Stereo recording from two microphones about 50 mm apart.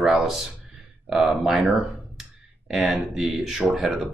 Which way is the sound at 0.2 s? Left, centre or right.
Centre.